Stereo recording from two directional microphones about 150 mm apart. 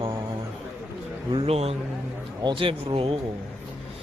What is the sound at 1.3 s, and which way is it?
Speech, 40° right (ahead or behind).